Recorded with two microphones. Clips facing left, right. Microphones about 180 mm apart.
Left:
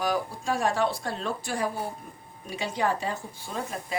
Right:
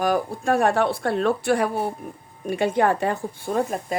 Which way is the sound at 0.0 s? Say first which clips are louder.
Right 6 dB; 55° right (ahead or behind).